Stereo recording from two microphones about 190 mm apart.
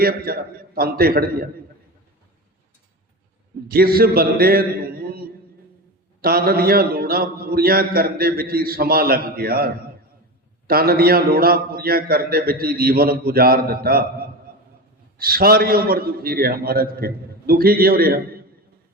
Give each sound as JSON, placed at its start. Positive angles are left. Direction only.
{"t": 0.0, "sound": "a man's voice", "side_deg": -50}
{"t": 3.7, "sound": "a man's voice", "side_deg": -50}